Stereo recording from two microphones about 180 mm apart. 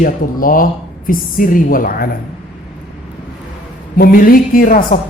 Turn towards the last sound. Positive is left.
turn(degrees=50)  # may be behind; listen again after turning